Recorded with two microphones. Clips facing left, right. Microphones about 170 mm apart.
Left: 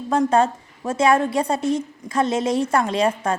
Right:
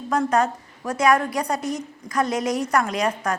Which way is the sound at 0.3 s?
25° left (ahead or behind).